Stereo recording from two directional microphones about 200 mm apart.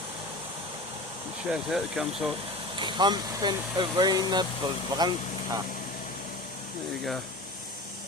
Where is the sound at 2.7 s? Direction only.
25° right (ahead or behind).